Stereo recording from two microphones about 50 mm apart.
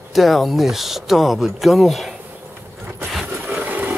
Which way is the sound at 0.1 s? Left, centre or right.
Centre.